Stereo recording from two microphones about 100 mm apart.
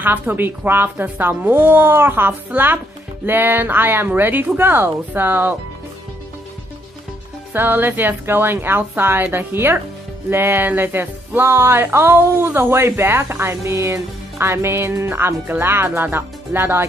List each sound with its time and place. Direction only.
0.0 s speech: 20° right (ahead or behind)
7.5 s speech: 20° right (ahead or behind)